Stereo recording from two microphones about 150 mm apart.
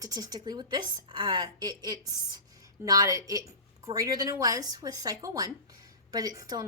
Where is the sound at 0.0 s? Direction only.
25° right (ahead or behind).